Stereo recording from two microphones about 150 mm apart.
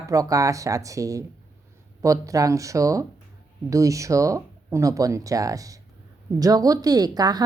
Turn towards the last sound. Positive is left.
turn(degrees=-25)  # may be behind; listen again after turning